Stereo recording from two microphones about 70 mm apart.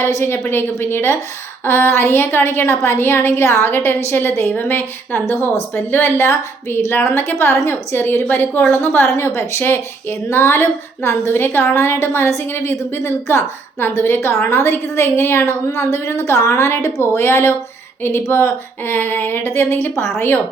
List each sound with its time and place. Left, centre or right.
0.0 s a woman's voice: left